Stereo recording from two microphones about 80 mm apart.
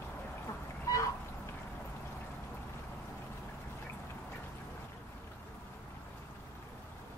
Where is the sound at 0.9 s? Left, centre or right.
Left.